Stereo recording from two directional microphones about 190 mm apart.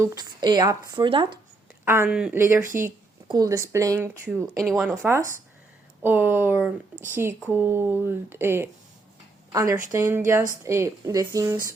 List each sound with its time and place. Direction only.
0.0 s speech: 15° right (ahead or behind)
1.8 s a woman's voice: 10° right (ahead or behind)
4.6 s speech: centre (ahead or behind)
4.9 s a woman's voice: 15° right (ahead or behind)